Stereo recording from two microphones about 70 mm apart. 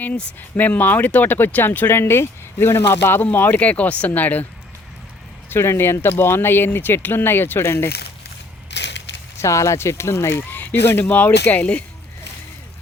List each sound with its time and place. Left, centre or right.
0.0 s speech: left
5.5 s speech: left
9.4 s speech: left
10.5 s speech: left